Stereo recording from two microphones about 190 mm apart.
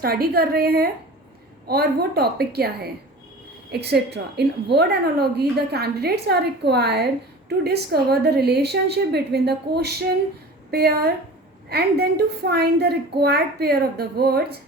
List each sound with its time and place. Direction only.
0.0 s a woman's voice: 55° right (ahead or behind)